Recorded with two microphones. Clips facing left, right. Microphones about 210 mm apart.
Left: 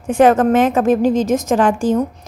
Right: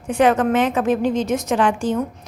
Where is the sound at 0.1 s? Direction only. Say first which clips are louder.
Left 5 dB; 45° left (ahead or behind).